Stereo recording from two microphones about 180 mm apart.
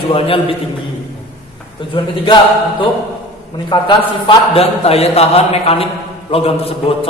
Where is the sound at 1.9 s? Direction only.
30° left (ahead or behind).